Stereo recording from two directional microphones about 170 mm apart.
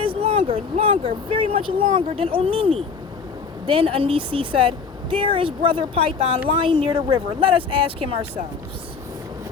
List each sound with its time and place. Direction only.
0.0 s speech: 35° right (ahead or behind)